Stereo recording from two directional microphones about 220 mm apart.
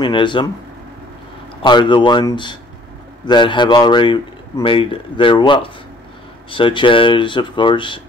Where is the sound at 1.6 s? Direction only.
20° left (ahead or behind).